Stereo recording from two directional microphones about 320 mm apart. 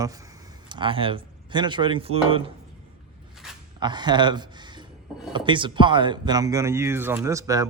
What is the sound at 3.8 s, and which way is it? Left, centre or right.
Speech, centre.